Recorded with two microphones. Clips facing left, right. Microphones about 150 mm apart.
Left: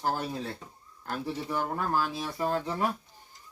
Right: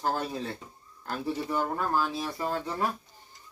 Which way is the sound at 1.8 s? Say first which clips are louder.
Right 1 dB; 5° left (ahead or behind).